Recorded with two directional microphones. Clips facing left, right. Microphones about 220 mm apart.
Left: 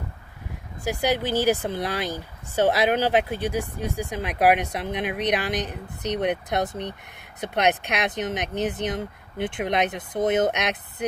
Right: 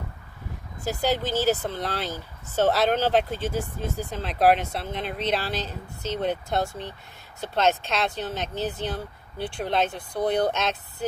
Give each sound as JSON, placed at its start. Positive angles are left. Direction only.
{"t": 0.8, "sound": "speech", "side_deg": 15}